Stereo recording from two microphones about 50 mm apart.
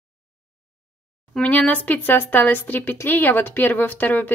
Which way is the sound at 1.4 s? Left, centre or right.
Left.